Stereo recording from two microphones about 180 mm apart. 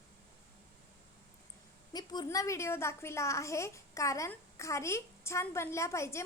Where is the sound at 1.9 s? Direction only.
20° left (ahead or behind).